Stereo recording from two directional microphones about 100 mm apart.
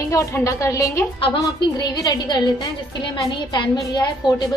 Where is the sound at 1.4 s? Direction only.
45° left (ahead or behind).